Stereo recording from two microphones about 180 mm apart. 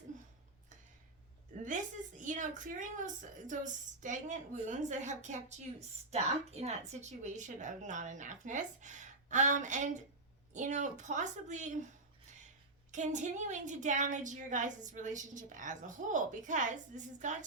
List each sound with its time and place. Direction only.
1.5 s a woman's voice: 45° right (ahead or behind)
12.9 s a woman's voice: 40° right (ahead or behind)